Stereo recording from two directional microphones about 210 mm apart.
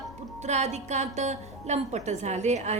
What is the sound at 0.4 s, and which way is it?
A woman's voice, 30° right (ahead or behind).